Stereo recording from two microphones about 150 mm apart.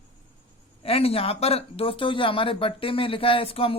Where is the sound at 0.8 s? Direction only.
40° left (ahead or behind).